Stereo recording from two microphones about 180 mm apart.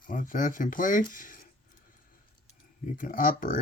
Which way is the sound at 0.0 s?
50° left (ahead or behind).